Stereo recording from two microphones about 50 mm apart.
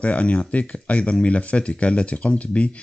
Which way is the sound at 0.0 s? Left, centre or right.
Left.